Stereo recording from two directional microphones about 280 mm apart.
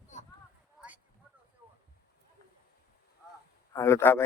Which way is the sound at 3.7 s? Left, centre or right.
Centre.